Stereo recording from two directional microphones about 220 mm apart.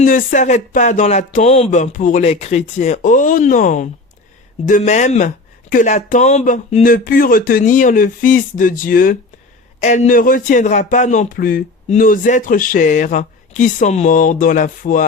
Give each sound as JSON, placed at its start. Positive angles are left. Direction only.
{"t": 0.0, "sound": "speech", "side_deg": 40}